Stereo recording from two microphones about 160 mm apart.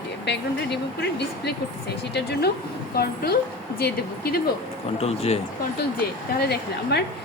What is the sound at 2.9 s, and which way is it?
A woman's voice, 80° left.